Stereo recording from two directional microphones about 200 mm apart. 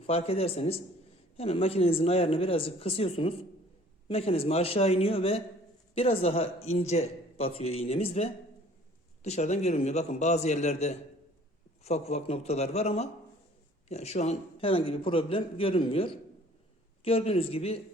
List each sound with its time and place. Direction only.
0.1 s a man's voice: 30° left (ahead or behind)